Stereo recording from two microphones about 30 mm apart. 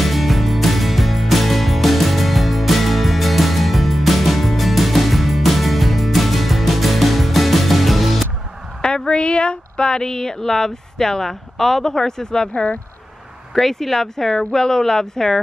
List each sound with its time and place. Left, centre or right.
0.0 s music: centre
8.8 s a sound: left
11.5 s speech: centre; by 12.7 s left
13.6 s speech: centre